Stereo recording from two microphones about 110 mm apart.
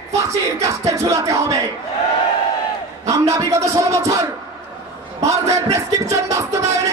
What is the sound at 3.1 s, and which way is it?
A man's voice, 30° right (ahead or behind).